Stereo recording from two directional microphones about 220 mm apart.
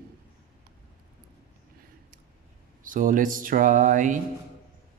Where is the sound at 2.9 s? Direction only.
40° right (ahead or behind).